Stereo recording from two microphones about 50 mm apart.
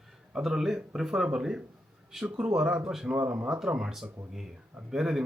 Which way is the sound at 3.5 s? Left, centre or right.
Centre.